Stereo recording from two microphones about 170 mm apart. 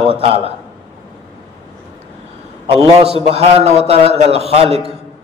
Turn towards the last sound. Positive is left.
turn(degrees=-35)  # may be behind; listen again after turning